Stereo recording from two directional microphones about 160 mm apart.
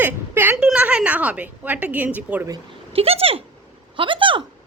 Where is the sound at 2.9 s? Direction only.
40° right (ahead or behind).